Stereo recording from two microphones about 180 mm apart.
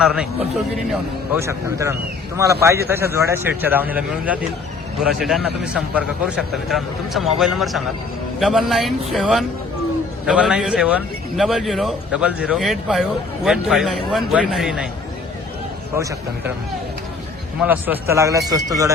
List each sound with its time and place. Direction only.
0.0 s a man's voice: 5° right (ahead or behind)
1.4 s a man's voice: 15° right (ahead or behind)
17.6 s a man's voice: 10° right (ahead or behind)